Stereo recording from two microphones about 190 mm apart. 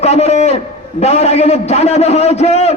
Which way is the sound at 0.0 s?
35° left (ahead or behind).